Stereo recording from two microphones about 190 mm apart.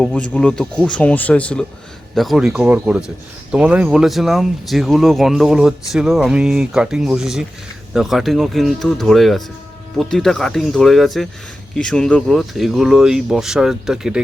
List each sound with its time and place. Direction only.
0.0 s speech: 5° left (ahead or behind)